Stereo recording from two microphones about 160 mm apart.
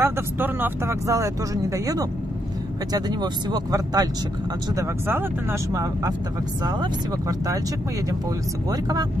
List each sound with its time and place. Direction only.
0.0 s speech: 10° right (ahead or behind)
8.6 s speech: 25° right (ahead or behind)